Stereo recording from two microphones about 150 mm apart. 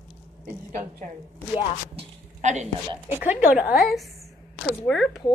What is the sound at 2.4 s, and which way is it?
Speech, 55° right (ahead or behind).